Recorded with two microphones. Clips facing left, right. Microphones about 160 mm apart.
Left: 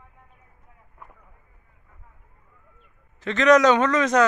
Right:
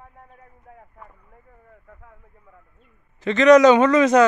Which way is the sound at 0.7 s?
60° right (ahead or behind).